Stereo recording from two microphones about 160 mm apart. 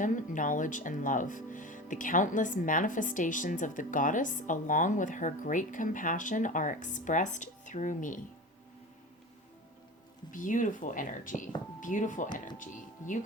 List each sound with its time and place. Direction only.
0.0 s speech: 55° left (ahead or behind)
10.3 s speech: 55° left (ahead or behind)